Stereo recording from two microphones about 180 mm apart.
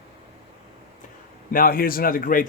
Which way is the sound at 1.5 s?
55° left (ahead or behind).